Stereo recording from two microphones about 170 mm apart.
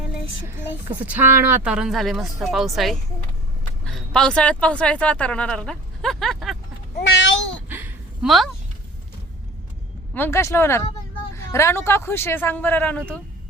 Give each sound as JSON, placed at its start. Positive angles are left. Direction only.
{"t": 1.0, "sound": "a woman's voice", "side_deg": -10}
{"t": 7.1, "sound": "speech", "side_deg": 90}
{"t": 7.7, "sound": "a sound", "side_deg": -10}
{"t": 10.2, "sound": "a woman's voice", "side_deg": 15}